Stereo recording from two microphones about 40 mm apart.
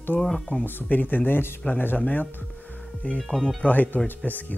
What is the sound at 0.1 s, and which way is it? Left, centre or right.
Speech, left.